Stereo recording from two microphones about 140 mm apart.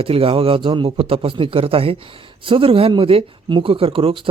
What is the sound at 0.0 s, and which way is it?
Speech, 40° right (ahead or behind).